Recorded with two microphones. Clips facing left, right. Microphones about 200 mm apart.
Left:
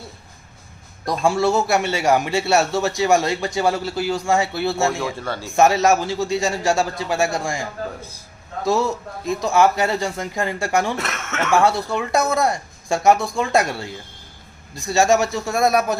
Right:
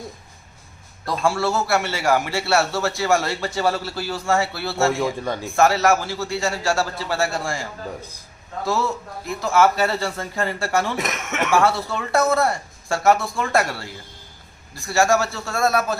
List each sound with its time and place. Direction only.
1.0 s a man's voice: 15° left (ahead or behind)
4.9 s a man's voice: 15° right (ahead or behind)
5.5 s a man's voice: 20° left (ahead or behind)
10.9 s speech: 15° right (ahead or behind)
11.5 s a man's voice: 15° left (ahead or behind)